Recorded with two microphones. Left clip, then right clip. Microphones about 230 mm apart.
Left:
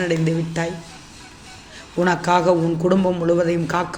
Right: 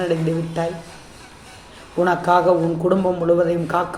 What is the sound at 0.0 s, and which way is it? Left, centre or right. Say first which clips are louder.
Speech: even; left.